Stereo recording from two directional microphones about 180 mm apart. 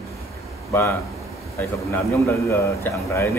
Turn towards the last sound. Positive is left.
turn(degrees=15)  # may be behind; listen again after turning